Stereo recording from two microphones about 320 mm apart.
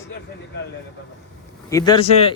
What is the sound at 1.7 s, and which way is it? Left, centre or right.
Speech, centre.